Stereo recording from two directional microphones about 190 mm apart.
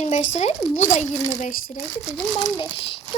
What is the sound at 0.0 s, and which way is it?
Speech, 40° left (ahead or behind).